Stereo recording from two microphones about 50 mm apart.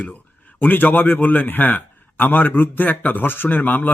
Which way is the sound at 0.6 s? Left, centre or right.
Left.